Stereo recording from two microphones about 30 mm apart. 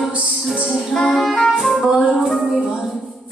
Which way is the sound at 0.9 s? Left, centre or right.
Centre.